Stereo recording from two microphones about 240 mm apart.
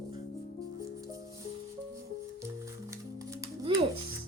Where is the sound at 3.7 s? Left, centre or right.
Right.